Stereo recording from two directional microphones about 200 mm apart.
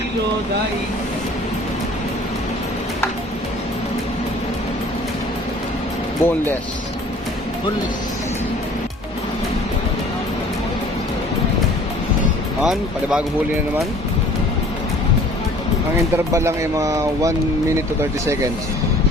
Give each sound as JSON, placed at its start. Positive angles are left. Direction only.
{"t": 6.2, "sound": "speech", "side_deg": 10}
{"t": 12.6, "sound": "speech", "side_deg": 0}
{"t": 16.1, "sound": "speech", "side_deg": -15}